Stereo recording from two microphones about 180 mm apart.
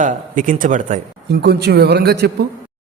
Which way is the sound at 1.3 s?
65° right (ahead or behind).